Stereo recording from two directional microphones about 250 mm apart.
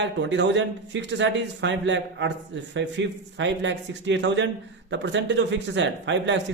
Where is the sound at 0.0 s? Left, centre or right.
Right.